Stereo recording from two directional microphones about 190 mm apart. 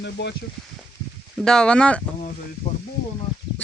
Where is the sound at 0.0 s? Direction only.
65° left (ahead or behind).